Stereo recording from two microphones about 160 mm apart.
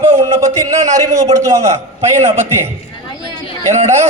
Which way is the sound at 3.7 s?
45° right (ahead or behind).